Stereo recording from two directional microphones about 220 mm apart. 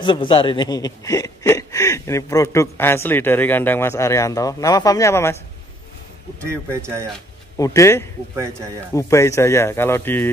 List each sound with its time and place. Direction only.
0.0 s speech: 20° left (ahead or behind)
6.4 s speech: 10° right (ahead or behind)
7.5 s speech: 15° left (ahead or behind)